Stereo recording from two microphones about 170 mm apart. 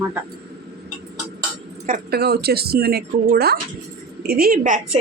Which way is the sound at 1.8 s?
60° right (ahead or behind).